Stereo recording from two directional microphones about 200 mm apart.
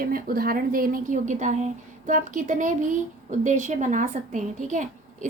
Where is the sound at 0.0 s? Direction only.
45° right (ahead or behind).